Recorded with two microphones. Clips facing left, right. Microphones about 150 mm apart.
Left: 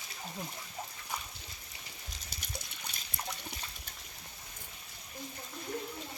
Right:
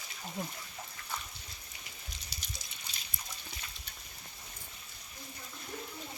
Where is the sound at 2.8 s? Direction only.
65° left (ahead or behind).